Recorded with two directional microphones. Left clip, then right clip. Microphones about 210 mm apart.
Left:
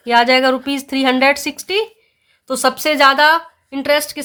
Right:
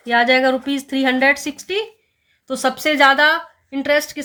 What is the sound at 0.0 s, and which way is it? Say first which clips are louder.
A woman's voice: left 2 dB; 35° left (ahead or behind).